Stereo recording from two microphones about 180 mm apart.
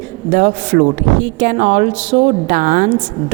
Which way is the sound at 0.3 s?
45° right (ahead or behind).